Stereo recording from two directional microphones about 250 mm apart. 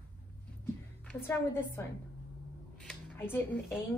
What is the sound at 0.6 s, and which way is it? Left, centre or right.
A woman's voice, centre.